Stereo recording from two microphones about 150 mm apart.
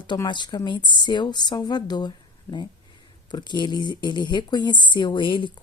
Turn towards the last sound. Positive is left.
turn(degrees=35)  # may be behind; listen again after turning